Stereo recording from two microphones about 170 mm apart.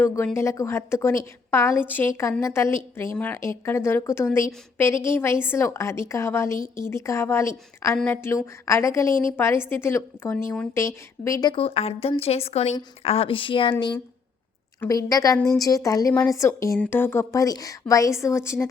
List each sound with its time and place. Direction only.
0.3 s a woman's voice: 15° left (ahead or behind)